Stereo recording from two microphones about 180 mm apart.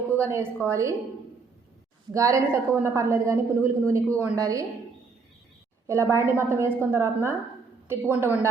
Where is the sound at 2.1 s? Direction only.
15° right (ahead or behind).